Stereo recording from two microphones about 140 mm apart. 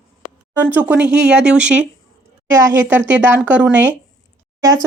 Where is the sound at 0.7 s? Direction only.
10° right (ahead or behind).